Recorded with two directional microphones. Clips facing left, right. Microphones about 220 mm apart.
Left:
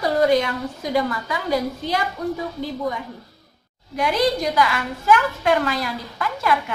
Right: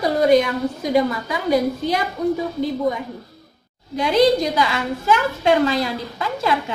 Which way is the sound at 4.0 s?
25° right (ahead or behind).